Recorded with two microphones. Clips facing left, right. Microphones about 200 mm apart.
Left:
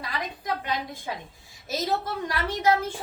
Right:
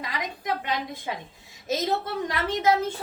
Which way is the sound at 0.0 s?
20° right (ahead or behind).